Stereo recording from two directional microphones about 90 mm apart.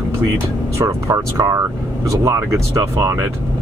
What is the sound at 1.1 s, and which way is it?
Speech, 35° right (ahead or behind).